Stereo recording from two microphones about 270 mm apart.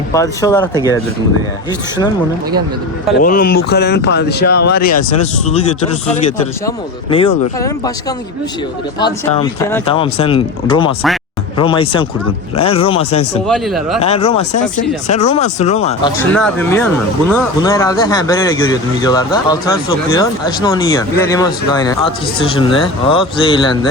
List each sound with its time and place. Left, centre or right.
0.1 s speech: centre
3.2 s speech: left
6.7 s speech: centre
9.0 s speech: centre
13.5 s speech: centre
14.0 s speech: left
16.3 s speech: centre